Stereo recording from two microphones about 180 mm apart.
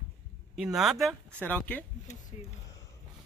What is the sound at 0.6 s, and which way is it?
Speech, centre (ahead or behind).